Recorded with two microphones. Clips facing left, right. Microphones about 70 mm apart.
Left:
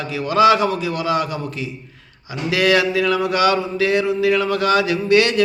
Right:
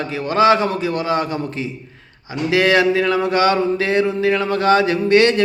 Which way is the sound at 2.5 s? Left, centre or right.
Right.